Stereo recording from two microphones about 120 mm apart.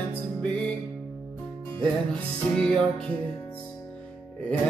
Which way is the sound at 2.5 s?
5° left (ahead or behind).